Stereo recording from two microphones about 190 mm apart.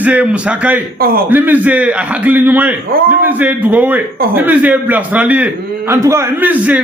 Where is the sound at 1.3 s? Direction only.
10° right (ahead or behind).